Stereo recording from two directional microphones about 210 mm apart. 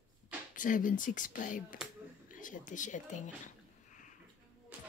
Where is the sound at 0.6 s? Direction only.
40° left (ahead or behind).